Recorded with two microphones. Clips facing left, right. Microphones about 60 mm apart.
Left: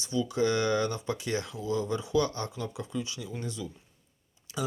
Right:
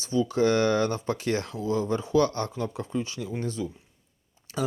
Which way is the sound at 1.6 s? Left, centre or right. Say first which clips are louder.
Right 4 dB; right.